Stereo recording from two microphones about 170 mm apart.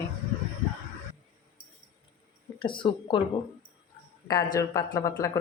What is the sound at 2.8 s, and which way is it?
Speech, 30° left (ahead or behind).